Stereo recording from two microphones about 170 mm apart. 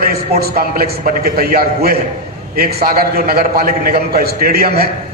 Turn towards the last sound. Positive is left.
turn(degrees=-65)  # may be behind; listen again after turning